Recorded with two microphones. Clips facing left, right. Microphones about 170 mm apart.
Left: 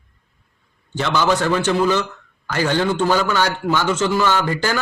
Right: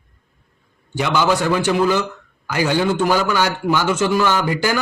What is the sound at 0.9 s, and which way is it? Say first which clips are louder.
A man's voice: right 1 dB; 10° right (ahead or behind).